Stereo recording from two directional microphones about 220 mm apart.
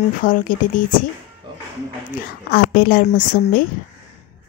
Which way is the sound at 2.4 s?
40° left (ahead or behind).